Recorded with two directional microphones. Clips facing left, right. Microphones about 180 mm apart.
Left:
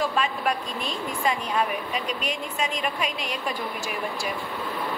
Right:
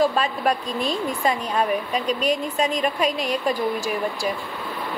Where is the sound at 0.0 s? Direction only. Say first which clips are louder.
Right 5 dB; 40° right (ahead or behind).